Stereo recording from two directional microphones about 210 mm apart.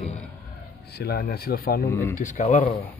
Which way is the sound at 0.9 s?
50° left (ahead or behind).